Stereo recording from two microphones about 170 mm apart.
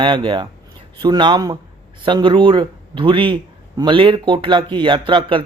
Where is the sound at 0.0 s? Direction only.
30° right (ahead or behind).